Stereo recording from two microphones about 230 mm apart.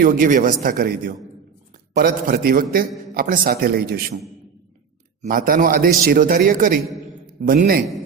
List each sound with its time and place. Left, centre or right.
0.0 s a man's voice: right
5.2 s a man's voice: right